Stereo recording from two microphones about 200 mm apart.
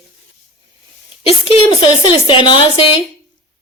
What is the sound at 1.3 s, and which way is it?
Speech, 25° left (ahead or behind).